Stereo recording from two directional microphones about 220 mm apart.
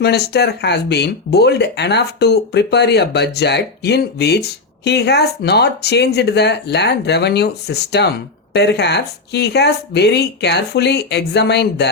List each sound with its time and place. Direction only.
0.0 s speech: 50° left (ahead or behind)